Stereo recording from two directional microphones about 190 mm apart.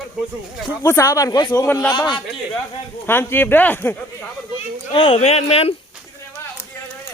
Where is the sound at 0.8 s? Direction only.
15° left (ahead or behind).